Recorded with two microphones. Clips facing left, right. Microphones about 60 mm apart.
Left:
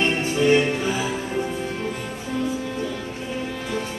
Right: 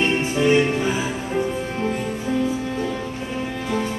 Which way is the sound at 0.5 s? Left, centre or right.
Centre.